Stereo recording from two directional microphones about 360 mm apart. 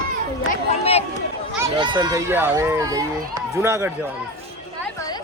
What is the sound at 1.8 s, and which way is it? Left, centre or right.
Speech, centre.